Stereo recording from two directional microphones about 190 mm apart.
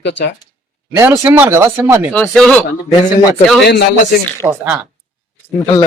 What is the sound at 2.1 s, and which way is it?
Speech, 5° left (ahead or behind).